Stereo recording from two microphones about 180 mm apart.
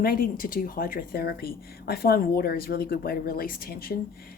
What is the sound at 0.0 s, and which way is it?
Speech, 55° left (ahead or behind).